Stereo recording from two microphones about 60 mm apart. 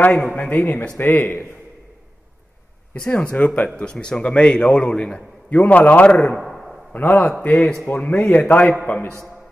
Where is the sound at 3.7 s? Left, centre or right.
Centre.